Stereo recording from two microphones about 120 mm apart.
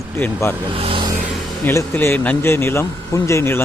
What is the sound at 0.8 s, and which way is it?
Vehicle, 50° right (ahead or behind).